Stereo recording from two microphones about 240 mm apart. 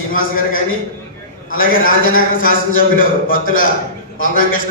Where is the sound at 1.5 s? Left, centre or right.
Left.